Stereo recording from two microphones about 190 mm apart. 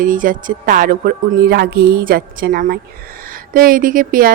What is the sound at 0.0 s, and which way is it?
Speech, 45° right (ahead or behind).